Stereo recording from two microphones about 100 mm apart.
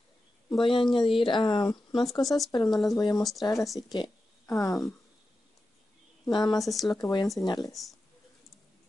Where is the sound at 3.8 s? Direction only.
50° left (ahead or behind).